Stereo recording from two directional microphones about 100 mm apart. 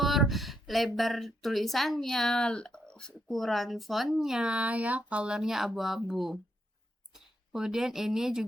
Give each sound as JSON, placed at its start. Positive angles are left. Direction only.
{"t": 0.0, "sound": "a sound", "side_deg": 0}
{"t": 0.9, "sound": "speech", "side_deg": 0}
{"t": 7.5, "sound": "speech", "side_deg": -5}